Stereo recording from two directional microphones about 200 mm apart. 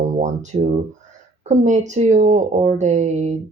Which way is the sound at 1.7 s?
35° right (ahead or behind).